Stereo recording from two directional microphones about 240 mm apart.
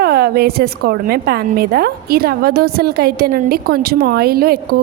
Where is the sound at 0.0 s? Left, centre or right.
Right.